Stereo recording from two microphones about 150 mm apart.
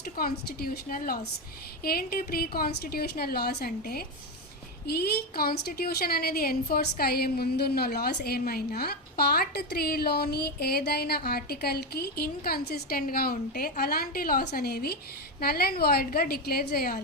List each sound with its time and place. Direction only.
0.0 s a woman's voice: 80° left